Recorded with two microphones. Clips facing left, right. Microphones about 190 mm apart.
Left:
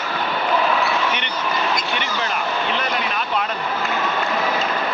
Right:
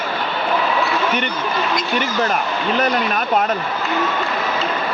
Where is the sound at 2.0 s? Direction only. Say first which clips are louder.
Right 5 dB; 45° right (ahead or behind).